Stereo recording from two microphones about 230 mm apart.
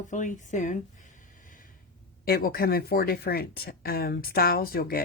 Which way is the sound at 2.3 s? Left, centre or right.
Left.